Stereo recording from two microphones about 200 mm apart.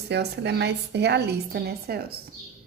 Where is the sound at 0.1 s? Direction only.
60° right (ahead or behind).